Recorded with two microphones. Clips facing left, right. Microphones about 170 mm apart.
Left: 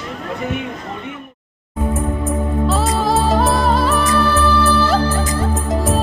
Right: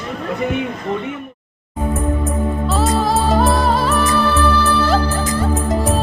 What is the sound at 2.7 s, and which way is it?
Music, centre (ahead or behind).